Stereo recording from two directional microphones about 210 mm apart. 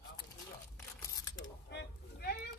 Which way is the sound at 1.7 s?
50° left (ahead or behind).